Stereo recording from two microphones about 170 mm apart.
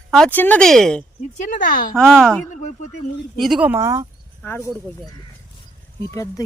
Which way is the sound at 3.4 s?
5° right (ahead or behind).